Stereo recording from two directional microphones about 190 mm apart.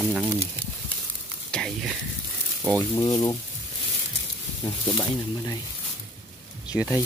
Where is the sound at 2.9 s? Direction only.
20° left (ahead or behind).